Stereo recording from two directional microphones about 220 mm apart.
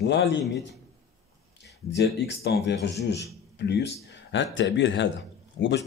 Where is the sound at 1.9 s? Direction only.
50° left (ahead or behind).